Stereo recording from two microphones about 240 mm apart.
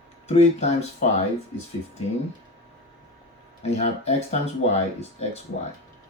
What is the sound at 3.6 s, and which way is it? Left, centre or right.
Speech, left.